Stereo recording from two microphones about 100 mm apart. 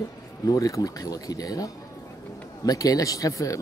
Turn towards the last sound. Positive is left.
turn(degrees=35)  # may be behind; listen again after turning